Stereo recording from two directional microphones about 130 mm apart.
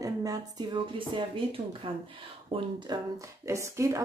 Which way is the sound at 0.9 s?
40° right (ahead or behind).